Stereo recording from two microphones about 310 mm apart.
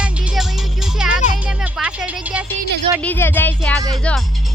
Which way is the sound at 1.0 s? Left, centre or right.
Centre.